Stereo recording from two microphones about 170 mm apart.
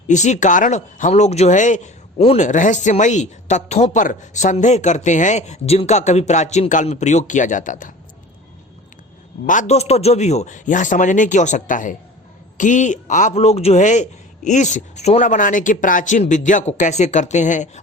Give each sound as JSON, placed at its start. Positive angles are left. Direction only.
{"t": 0.1, "sound": "speech", "side_deg": 45}
{"t": 9.5, "sound": "speech", "side_deg": 45}